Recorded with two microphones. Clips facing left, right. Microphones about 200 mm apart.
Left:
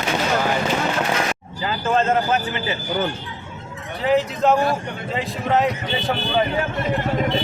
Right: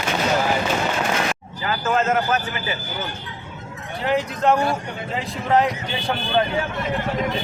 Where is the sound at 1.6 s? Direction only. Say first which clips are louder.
Left 1 dB; 30° left (ahead or behind).